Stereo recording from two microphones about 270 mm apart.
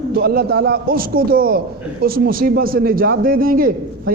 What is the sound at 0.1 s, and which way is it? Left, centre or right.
A man's voice, right.